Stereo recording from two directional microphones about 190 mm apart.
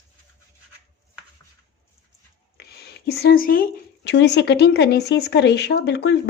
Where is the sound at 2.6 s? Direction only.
60° left (ahead or behind).